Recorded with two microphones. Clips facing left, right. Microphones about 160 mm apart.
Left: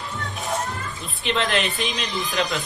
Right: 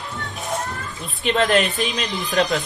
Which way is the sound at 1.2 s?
45° right (ahead or behind).